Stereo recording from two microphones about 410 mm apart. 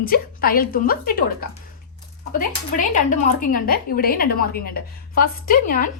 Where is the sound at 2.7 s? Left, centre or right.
Centre.